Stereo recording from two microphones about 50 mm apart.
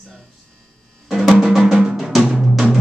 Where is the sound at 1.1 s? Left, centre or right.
Centre.